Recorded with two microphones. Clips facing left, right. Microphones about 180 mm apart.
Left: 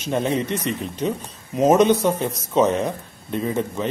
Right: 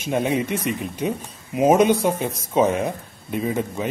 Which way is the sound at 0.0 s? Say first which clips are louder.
Even; 10° right (ahead or behind).